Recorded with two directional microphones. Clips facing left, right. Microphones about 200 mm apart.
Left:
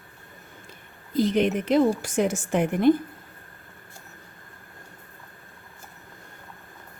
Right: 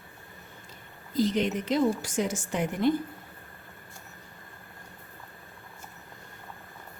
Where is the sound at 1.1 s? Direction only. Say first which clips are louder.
Left 4 dB; 60° left (ahead or behind).